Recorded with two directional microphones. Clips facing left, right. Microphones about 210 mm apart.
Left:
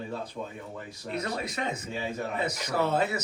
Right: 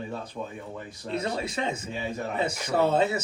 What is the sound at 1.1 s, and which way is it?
Speech, 25° right (ahead or behind).